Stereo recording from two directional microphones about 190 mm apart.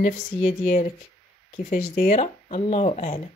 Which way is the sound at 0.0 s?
40° left (ahead or behind).